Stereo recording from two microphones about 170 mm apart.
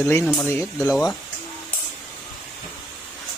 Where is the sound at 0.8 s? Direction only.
Centre (ahead or behind).